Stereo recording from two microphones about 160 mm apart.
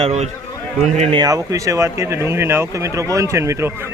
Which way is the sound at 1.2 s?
20° right (ahead or behind).